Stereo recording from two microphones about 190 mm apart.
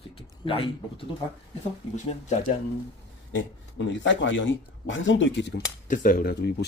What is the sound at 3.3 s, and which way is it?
Speech, 70° left (ahead or behind).